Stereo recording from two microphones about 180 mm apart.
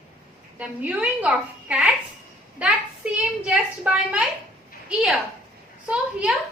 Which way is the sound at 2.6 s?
5° right (ahead or behind).